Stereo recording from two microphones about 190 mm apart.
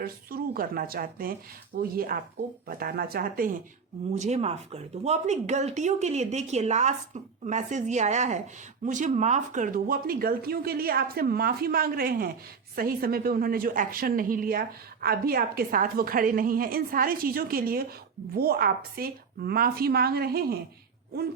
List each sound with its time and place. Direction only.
0.0 s speech: 50° right (ahead or behind)
4.1 s speech: 35° right (ahead or behind); by 20.6 s 55° right (ahead or behind)